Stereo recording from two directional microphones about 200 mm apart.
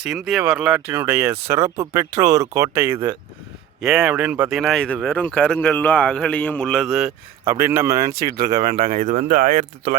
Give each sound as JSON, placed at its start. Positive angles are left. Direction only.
{"t": 0.0, "sound": "speech", "side_deg": 0}
{"t": 7.4, "sound": "speech", "side_deg": -10}
{"t": 8.1, "sound": "speech", "side_deg": -50}